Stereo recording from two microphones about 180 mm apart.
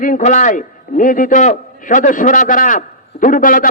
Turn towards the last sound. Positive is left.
turn(degrees=50)  # may be behind; listen again after turning